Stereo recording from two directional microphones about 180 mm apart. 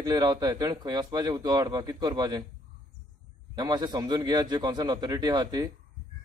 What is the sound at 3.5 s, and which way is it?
A man's voice, 25° right (ahead or behind).